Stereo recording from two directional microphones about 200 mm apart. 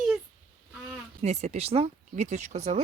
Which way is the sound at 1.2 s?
35° right (ahead or behind).